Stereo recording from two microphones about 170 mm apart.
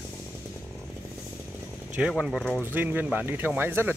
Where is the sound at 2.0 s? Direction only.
5° right (ahead or behind).